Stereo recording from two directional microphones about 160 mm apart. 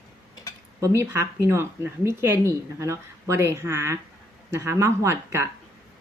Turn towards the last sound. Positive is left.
turn(degrees=-15)  # may be behind; listen again after turning